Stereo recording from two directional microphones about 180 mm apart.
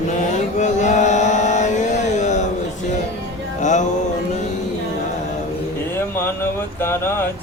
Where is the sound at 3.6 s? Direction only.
40° left (ahead or behind).